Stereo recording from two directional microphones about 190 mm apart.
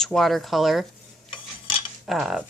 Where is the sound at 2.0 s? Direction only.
Centre (ahead or behind).